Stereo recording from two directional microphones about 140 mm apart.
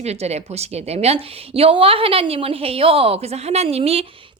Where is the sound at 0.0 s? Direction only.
50° right (ahead or behind).